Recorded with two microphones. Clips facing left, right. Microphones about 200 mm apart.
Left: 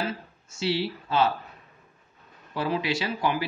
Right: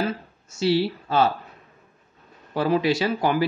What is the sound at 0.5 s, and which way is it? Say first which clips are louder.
Speech: right 6 dB; 40° right (ahead or behind).